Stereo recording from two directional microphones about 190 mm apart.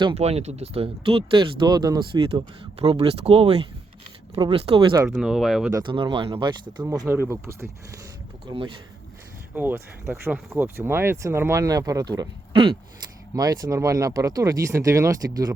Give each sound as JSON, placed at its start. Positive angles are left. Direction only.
{"t": 0.0, "sound": "speech", "side_deg": -30}
{"t": 5.0, "sound": "speech", "side_deg": 0}
{"t": 5.7, "sound": "speech", "side_deg": -25}
{"t": 8.4, "sound": "speech", "side_deg": -25}
{"t": 9.6, "sound": "speech", "side_deg": -10}